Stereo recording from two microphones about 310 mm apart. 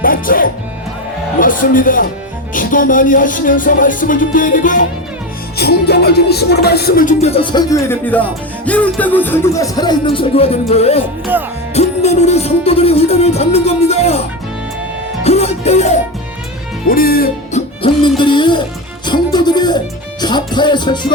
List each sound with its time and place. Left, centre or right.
0.0 s music: left
1.4 s a man's voice: left
2.5 s music: left
11.3 s music: centre
11.7 s music: left
15.2 s music: centre
17.8 s music: centre